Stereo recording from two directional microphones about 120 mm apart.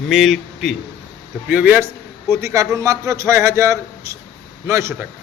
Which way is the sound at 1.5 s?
15° right (ahead or behind).